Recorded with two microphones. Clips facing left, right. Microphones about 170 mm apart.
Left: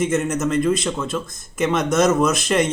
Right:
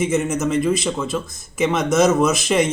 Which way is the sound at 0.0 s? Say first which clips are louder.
Right 1 dB; 5° right (ahead or behind).